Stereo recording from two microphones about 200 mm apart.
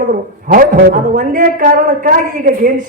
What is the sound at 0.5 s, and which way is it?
A man's voice, 45° right (ahead or behind).